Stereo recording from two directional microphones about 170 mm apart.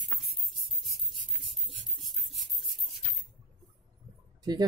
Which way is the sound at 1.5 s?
Centre (ahead or behind).